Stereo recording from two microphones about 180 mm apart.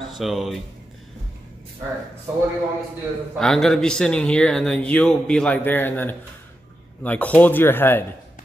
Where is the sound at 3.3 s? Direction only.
Centre (ahead or behind).